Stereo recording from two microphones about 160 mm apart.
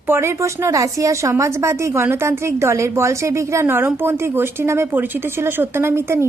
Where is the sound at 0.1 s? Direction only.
15° right (ahead or behind).